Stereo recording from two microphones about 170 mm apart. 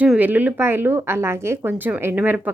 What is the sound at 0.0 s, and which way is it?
A woman's voice, 10° right (ahead or behind).